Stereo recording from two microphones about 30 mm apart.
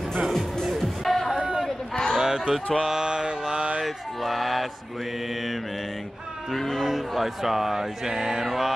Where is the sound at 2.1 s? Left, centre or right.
Right.